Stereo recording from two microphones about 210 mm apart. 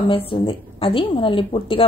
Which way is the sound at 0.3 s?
25° left (ahead or behind).